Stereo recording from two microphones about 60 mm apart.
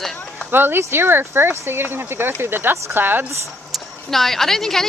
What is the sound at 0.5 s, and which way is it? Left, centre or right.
Speech, right.